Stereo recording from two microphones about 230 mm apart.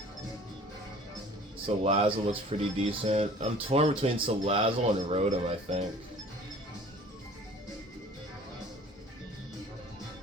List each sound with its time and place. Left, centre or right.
1.6 s speech: right